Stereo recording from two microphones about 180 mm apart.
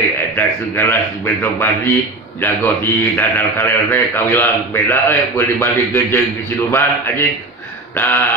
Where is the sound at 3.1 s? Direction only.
10° left (ahead or behind).